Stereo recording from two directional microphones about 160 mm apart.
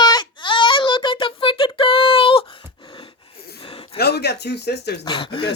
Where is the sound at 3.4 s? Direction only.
75° left (ahead or behind).